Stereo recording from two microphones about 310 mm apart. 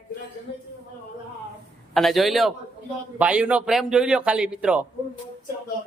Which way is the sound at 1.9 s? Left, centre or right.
Centre.